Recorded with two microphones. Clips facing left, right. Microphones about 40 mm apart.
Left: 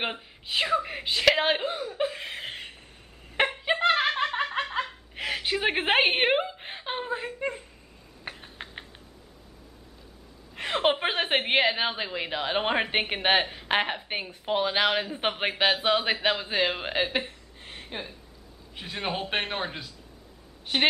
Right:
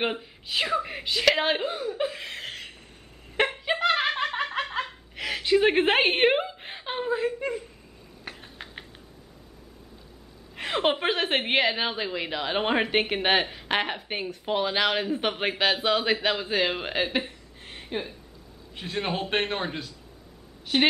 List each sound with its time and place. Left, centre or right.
0.0 s a man's voice: centre
3.6 s snicker: centre
5.2 s a sound: centre
5.6 s a man's voice: centre
8.3 s typing: centre
10.5 s a woman's voice: centre